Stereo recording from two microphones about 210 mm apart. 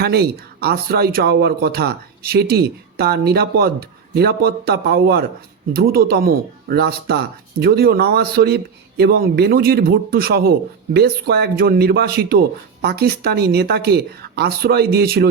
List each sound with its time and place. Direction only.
0.0 s speech: 50° right (ahead or behind)